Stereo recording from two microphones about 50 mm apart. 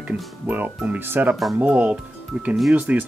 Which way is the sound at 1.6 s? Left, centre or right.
Right.